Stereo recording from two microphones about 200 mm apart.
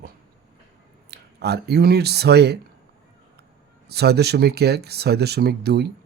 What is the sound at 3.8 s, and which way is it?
Speech, 55° right (ahead or behind).